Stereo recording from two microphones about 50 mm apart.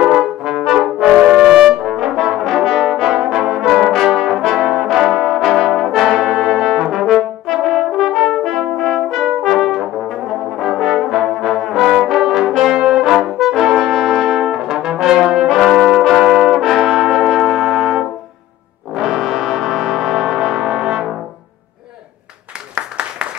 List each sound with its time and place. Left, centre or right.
0.0 s brass instrument: centre
2.1 s brass instrument: centre
18.9 s music: centre
22.8 s applause: right